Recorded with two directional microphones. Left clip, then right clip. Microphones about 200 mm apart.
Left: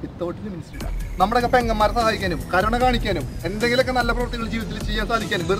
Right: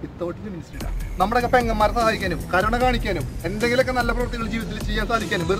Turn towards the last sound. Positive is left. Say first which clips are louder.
# even
turn(degrees=-5)  # may be behind; listen again after turning